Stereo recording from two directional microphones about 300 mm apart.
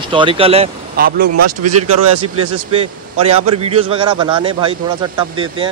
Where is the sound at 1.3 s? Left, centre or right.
Right.